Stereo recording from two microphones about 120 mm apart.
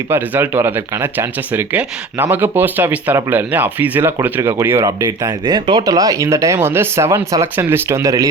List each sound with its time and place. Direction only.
0.1 s speech: 20° right (ahead or behind)
5.2 s speech: 35° right (ahead or behind)